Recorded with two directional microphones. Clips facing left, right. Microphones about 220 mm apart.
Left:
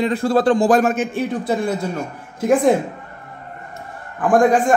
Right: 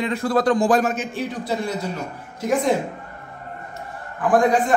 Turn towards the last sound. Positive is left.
turn(degrees=45)  # may be behind; listen again after turning